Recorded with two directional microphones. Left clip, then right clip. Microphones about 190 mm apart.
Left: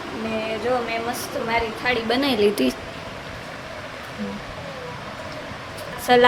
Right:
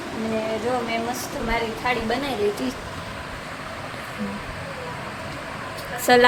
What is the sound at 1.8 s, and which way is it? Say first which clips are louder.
Speech: left 1 dB; 15° left (ahead or behind).